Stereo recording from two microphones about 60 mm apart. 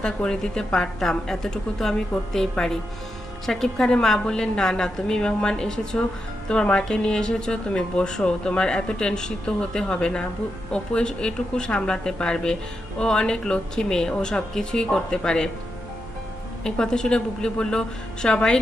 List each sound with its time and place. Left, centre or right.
0.0 s speech: centre
16.6 s speech: centre